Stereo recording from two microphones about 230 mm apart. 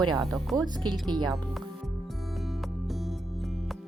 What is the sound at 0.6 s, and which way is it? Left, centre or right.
Speech, centre.